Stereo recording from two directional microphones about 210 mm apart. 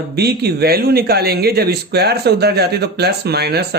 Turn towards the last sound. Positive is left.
turn(degrees=-50)  # may be behind; listen again after turning